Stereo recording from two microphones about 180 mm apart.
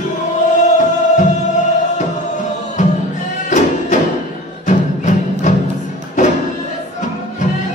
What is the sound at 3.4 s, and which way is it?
Music, 40° left (ahead or behind).